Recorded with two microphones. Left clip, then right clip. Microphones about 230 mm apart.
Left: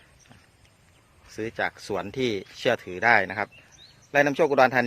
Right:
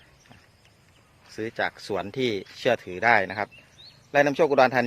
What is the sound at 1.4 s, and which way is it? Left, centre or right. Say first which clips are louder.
A man's voice: even; centre.